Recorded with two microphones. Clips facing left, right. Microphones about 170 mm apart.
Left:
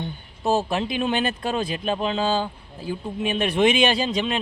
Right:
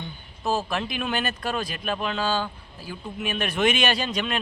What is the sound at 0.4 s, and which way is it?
Speech, 30° left (ahead or behind).